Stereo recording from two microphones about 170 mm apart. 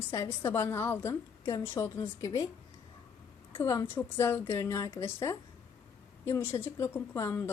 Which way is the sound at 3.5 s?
15° left (ahead or behind).